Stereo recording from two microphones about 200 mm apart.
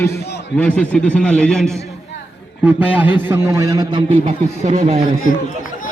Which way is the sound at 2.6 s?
5° right (ahead or behind).